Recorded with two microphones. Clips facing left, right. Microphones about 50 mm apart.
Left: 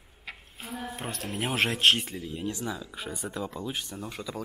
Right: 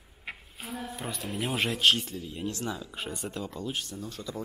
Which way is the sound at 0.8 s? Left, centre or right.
Left.